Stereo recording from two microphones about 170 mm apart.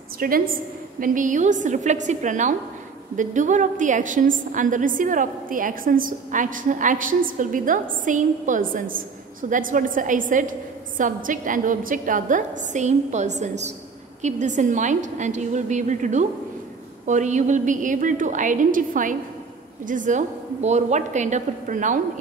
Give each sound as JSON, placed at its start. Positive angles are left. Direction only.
{"t": 0.2, "sound": "a woman's voice", "side_deg": -55}